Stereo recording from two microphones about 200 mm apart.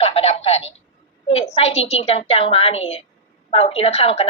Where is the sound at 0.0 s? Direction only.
30° left (ahead or behind).